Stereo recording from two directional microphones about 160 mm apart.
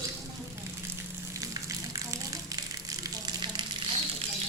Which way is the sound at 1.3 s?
20° right (ahead or behind).